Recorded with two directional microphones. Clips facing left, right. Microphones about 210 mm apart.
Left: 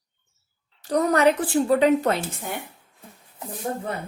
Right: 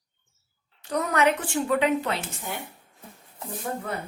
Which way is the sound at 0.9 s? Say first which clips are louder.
Left 5 dB; 35° left (ahead or behind).